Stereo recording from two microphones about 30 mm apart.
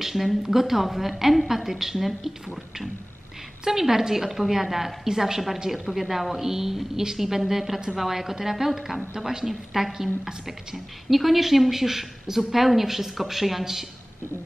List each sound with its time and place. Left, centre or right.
0.0 s a woman's voice: centre
5.7 s a woman's voice: centre
9.5 s a woman's voice: centre
11.1 s a woman's voice: centre